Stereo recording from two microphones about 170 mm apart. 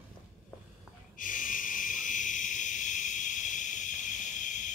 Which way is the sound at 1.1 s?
50° left (ahead or behind).